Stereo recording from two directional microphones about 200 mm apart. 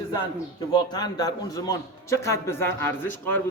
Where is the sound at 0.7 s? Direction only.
20° left (ahead or behind).